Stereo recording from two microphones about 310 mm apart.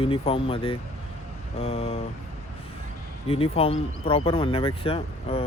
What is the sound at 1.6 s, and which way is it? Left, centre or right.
Vehicle, centre.